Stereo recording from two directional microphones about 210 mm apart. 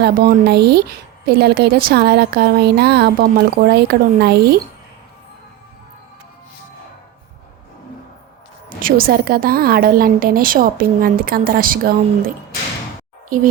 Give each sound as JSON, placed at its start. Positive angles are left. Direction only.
{"t": 0.0, "sound": "a woman's voice", "side_deg": -50}
{"t": 8.8, "sound": "a woman's voice", "side_deg": -45}